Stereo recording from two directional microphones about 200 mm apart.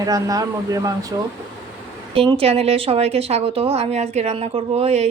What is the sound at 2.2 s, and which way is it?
A woman's voice, 30° right (ahead or behind).